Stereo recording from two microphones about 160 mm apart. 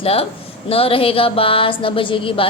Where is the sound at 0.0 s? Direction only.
35° left (ahead or behind).